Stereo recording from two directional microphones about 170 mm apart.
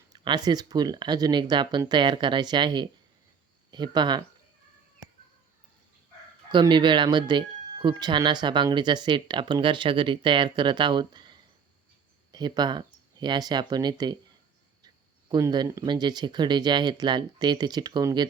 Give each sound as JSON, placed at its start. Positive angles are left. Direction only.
{"t": 0.1, "sound": "speech", "side_deg": -25}
{"t": 6.5, "sound": "speech", "side_deg": -25}
{"t": 15.3, "sound": "speech", "side_deg": -25}